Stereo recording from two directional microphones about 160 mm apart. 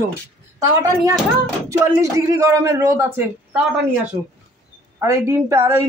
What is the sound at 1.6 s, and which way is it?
Speech, 20° right (ahead or behind).